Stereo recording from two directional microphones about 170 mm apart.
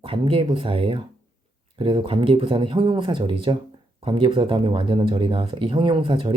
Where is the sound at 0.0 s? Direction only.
30° right (ahead or behind).